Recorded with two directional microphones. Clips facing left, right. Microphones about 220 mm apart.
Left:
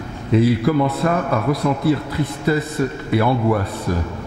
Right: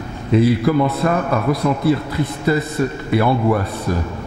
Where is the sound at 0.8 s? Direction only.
25° right (ahead or behind).